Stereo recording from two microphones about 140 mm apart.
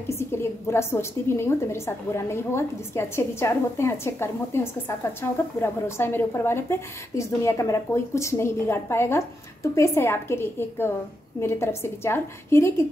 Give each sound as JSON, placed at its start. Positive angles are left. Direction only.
{"t": 0.1, "sound": "a woman's voice", "side_deg": 20}